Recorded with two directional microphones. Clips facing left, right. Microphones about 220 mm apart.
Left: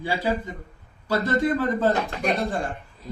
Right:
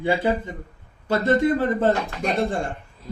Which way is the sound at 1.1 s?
25° right (ahead or behind).